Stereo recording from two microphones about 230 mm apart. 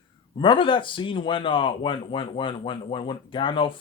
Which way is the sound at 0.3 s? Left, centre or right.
Left.